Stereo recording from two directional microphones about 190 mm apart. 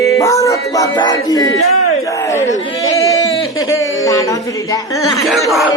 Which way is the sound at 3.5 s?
15° left (ahead or behind).